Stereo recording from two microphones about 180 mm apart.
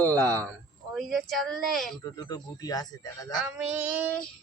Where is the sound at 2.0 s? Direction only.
20° left (ahead or behind).